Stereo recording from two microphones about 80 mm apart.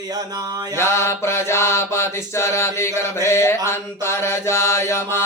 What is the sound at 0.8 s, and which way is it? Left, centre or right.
Mantra, left.